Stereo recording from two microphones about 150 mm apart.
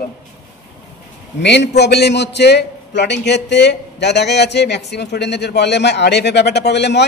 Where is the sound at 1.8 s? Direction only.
90° left.